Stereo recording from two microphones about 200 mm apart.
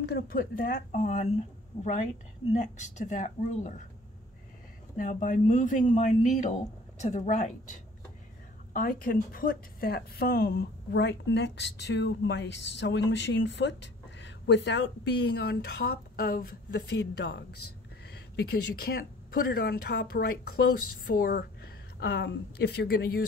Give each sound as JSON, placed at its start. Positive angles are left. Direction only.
{"t": 0.0, "sound": "speech", "side_deg": 50}
{"t": 2.5, "sound": "speech", "side_deg": 35}
{"t": 4.9, "sound": "speech", "side_deg": 40}
{"t": 8.7, "sound": "a woman's voice", "side_deg": 45}